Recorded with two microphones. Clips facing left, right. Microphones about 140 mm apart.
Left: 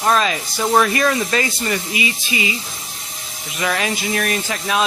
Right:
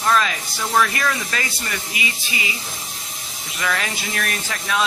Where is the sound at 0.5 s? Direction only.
30° left (ahead or behind).